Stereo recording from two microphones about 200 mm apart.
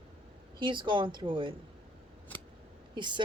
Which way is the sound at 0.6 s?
25° right (ahead or behind).